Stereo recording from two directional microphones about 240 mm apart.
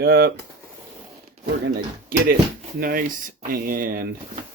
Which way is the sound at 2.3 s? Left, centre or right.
Right.